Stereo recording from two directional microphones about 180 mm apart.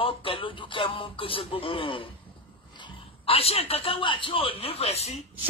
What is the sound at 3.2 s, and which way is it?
A man's voice, 35° left (ahead or behind).